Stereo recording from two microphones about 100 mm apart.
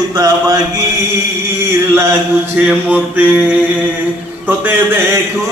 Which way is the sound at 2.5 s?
15° right (ahead or behind).